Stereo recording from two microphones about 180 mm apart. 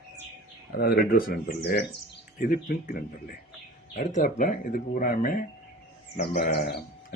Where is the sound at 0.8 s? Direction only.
55° left (ahead or behind).